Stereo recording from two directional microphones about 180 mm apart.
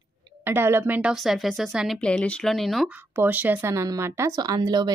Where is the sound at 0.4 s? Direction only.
10° right (ahead or behind).